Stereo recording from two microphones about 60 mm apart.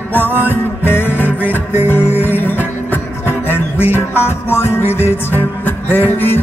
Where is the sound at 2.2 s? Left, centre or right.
Left.